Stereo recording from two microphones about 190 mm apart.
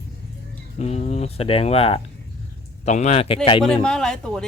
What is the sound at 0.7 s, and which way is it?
A man's voice, 35° left (ahead or behind).